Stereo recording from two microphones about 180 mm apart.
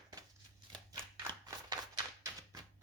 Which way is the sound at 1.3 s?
20° right (ahead or behind).